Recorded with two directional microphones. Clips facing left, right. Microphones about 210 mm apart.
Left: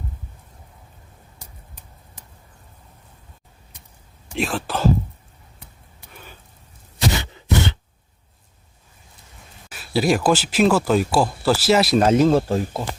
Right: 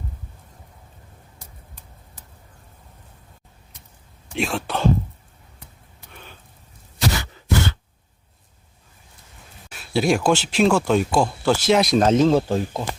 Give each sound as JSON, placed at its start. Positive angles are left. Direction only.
{"t": 4.4, "sound": "speech", "side_deg": 0}
{"t": 7.1, "sound": "a sound", "side_deg": 20}
{"t": 9.6, "sound": "speech", "side_deg": 0}